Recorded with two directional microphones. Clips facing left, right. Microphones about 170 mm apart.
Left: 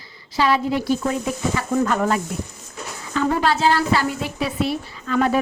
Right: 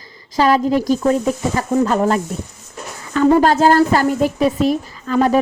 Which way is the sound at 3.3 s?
45° right (ahead or behind).